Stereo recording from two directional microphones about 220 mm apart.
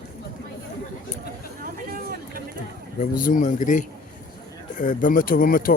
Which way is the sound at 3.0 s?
35° left (ahead or behind).